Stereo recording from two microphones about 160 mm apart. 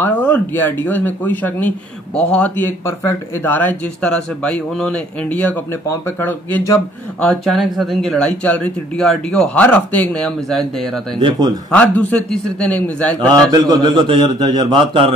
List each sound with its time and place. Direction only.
0.0 s speech: 10° left (ahead or behind)
7.2 s speech: centre (ahead or behind)
13.3 s a man's voice: 25° right (ahead or behind)